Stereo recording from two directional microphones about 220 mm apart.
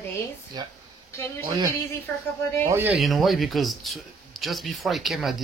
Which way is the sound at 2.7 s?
10° right (ahead or behind).